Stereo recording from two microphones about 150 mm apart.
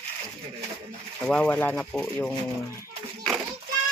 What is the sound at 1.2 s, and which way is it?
Speech, 5° left (ahead or behind).